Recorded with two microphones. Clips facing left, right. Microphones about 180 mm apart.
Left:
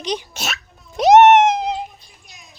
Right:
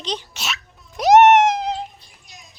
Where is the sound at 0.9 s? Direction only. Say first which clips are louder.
Left 2 dB; 25° left (ahead or behind).